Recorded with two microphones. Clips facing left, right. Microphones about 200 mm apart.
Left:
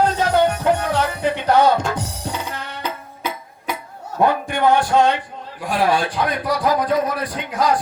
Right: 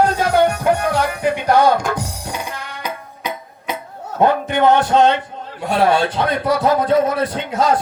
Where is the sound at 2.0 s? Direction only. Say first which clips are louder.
Right 1 dB; 10° right (ahead or behind).